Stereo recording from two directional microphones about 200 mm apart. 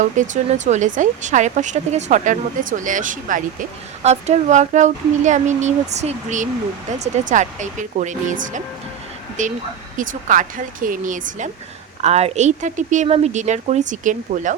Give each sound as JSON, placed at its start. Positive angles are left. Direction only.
{"t": 0.0, "sound": "speech", "side_deg": -35}